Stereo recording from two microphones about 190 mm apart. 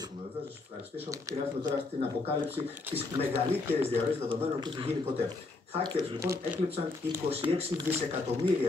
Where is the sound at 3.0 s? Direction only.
30° right (ahead or behind).